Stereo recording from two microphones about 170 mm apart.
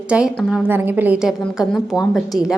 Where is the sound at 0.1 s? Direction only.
10° right (ahead or behind).